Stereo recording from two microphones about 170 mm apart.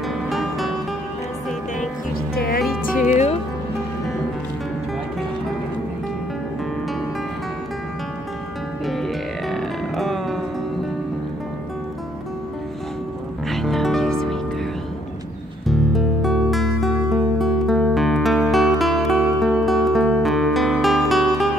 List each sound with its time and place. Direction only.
0.3 s music: centre (ahead or behind)
2.3 s music: 60° left (ahead or behind)
3.1 s music: 40° left (ahead or behind)
8.8 s music: centre (ahead or behind)
13.5 s music: centre (ahead or behind)
15.6 s music: centre (ahead or behind)